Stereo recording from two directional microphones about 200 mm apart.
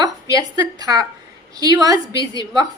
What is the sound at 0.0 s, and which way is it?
A woman's voice, 20° right (ahead or behind).